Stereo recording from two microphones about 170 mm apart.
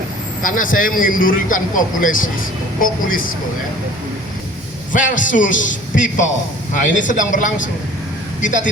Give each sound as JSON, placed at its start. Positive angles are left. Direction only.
{"t": 0.4, "sound": "a man's voice", "side_deg": 50}
{"t": 4.9, "sound": "a man's voice", "side_deg": 50}